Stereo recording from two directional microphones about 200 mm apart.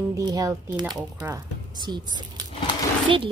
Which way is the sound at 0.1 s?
15° right (ahead or behind).